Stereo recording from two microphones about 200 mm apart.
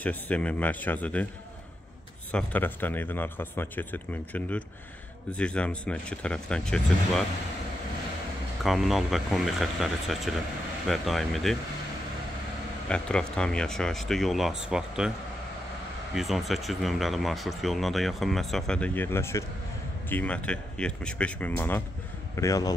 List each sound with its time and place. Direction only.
0.0 s a man's voice: 5° left (ahead or behind)
2.3 s a man's voice: 10° left (ahead or behind)
8.6 s speech: centre (ahead or behind)
12.8 s speech: 5° left (ahead or behind)
16.2 s a man's voice: centre (ahead or behind); by 22.8 s 15° left (ahead or behind)